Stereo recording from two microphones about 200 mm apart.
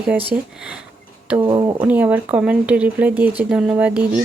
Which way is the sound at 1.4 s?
25° right (ahead or behind).